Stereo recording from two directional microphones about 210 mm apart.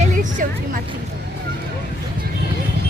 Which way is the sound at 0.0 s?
35° right (ahead or behind).